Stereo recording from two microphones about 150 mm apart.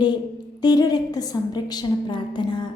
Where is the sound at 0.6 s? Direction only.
25° left (ahead or behind).